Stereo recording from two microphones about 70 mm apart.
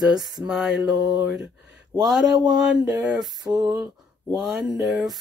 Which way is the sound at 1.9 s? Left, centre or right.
Right.